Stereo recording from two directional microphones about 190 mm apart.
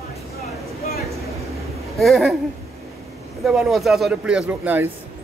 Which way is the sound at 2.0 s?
Centre (ahead or behind).